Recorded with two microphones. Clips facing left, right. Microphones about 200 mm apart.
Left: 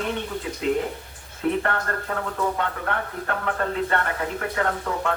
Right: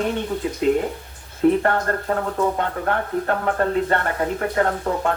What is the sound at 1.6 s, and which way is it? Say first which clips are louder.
Speech: right 5 dB; 35° right (ahead or behind).